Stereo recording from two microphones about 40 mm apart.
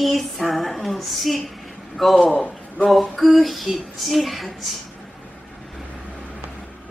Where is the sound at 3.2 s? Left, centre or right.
Centre.